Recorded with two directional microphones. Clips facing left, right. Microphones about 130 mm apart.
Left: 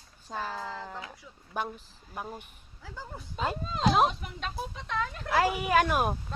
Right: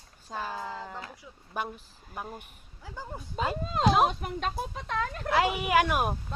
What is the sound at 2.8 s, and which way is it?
Speech, 20° right (ahead or behind).